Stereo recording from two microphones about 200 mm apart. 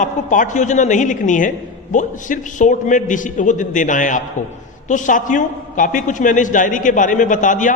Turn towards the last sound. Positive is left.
turn(degrees=40)  # may be behind; listen again after turning